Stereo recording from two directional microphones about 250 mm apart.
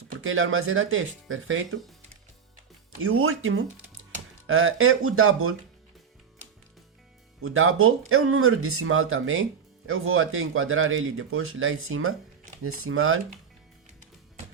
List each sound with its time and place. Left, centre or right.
0.2 s speech: right
3.0 s speech: right
7.4 s speech: right